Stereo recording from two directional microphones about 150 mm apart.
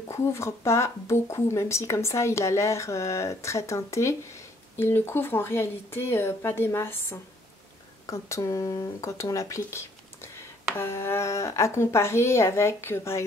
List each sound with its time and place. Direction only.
0.1 s speech: 20° left (ahead or behind)